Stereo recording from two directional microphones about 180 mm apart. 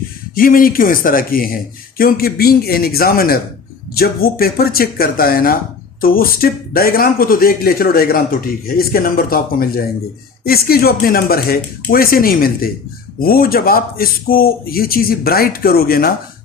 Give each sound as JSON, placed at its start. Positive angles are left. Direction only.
{"t": 0.3, "sound": "speech", "side_deg": 50}